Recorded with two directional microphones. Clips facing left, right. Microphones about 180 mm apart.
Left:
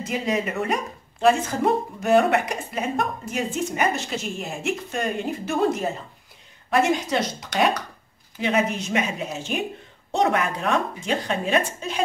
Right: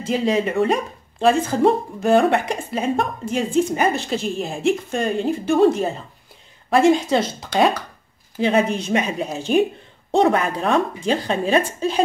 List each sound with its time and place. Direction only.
0.0 s speech: 30° right (ahead or behind)